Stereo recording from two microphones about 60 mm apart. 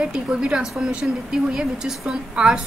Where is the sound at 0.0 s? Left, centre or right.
Centre.